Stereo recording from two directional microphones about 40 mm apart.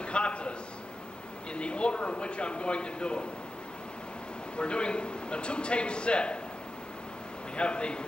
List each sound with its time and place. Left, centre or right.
0.0 s a sound: left
1.5 s a man's voice: left
4.6 s a man's voice: left
7.5 s a man's voice: left